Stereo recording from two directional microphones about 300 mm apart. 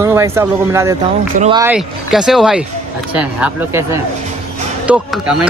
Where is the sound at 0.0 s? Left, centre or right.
Centre.